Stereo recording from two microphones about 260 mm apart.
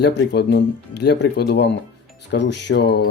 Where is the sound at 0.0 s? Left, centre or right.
Left.